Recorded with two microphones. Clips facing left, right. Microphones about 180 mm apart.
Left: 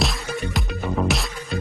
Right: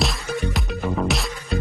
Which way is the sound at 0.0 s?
Centre (ahead or behind).